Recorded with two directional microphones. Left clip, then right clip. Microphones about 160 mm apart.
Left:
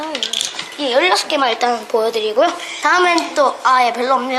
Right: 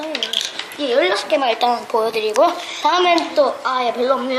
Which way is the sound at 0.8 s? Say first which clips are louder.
Left 3 dB; 30° left (ahead or behind).